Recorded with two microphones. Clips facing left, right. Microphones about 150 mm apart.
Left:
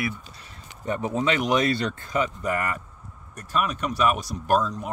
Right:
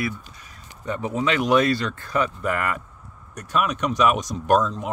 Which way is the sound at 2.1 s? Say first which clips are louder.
Right 2 dB; 45° right (ahead or behind).